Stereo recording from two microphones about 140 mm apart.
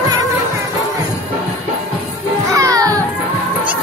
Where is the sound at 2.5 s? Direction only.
25° right (ahead or behind).